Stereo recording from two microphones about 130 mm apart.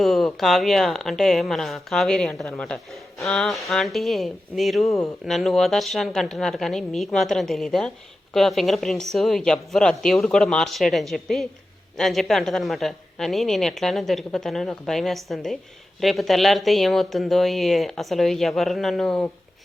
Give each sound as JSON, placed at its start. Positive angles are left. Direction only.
{"t": 0.0, "sound": "speech", "side_deg": 0}